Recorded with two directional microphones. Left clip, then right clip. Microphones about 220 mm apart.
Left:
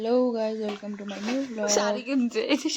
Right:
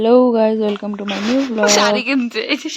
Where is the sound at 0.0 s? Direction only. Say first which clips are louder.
Right 12 dB; 35° right (ahead or behind).